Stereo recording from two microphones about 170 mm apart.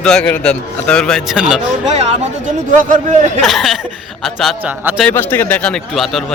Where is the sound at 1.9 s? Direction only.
40° right (ahead or behind).